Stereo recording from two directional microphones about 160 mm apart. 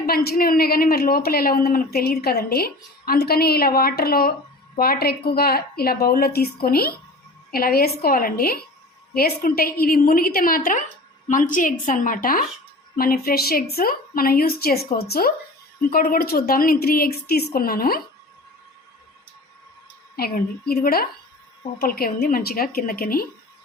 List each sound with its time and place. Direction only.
0.0 s a woman's voice: 75° left (ahead or behind)
15.8 s a woman's voice: 65° left (ahead or behind)
20.1 s a woman's voice: 70° left (ahead or behind)